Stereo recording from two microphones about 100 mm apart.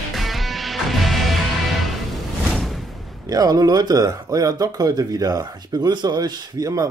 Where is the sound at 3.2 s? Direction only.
40° right (ahead or behind).